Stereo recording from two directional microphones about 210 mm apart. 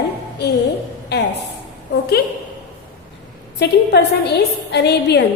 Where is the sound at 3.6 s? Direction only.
50° left (ahead or behind).